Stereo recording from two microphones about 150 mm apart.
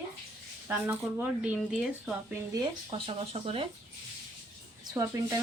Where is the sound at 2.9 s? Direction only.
40° right (ahead or behind).